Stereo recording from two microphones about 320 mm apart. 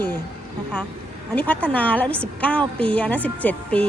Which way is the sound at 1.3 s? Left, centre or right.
Centre.